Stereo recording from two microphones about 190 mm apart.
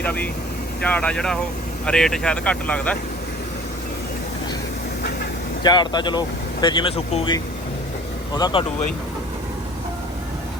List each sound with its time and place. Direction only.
0.0 s speech: 10° left (ahead or behind)
5.6 s speech: 20° left (ahead or behind)